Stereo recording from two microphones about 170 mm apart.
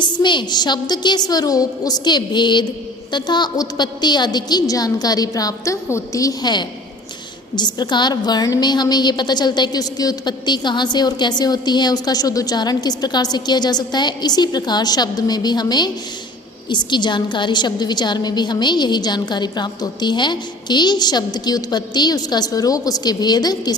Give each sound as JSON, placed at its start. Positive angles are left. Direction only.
{"t": 0.0, "sound": "a woman's voice", "side_deg": 25}